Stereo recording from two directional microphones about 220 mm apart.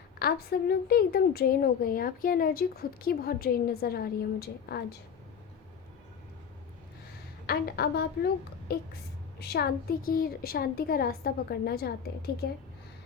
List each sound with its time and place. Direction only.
0.2 s a woman's voice: 45° left (ahead or behind)
7.4 s a woman's voice: 45° left (ahead or behind)
9.4 s a woman's voice: 45° left (ahead or behind)